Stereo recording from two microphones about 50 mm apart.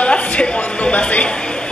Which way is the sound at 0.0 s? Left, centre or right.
Left.